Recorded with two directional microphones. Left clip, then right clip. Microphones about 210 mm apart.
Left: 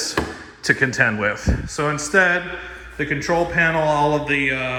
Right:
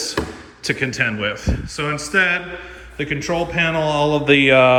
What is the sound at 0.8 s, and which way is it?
A man's voice, 5° left (ahead or behind).